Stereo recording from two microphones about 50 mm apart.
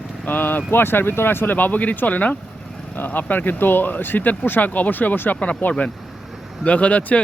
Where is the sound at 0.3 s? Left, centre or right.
Left.